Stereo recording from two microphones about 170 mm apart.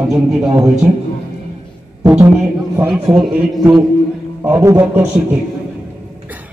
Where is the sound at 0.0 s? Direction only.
5° right (ahead or behind).